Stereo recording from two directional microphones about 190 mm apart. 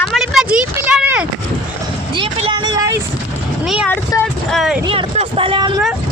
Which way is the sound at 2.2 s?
25° right (ahead or behind).